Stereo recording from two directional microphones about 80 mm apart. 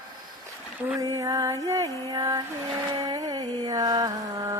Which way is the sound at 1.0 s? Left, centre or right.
Right.